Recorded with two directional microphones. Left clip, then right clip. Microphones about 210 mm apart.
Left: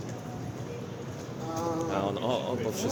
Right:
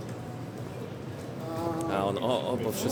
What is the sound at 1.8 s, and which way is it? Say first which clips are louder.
Speech: right 5 dB; 15° right (ahead or behind).